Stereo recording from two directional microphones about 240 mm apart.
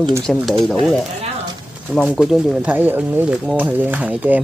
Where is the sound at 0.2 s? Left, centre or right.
Centre.